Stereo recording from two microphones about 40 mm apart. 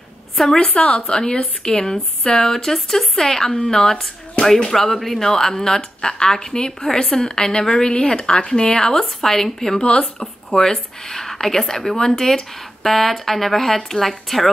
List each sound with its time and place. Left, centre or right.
0.7 s a woman's voice: left; by 9.8 s centre
9.8 s a woman's voice: left
10.1 s speech: centre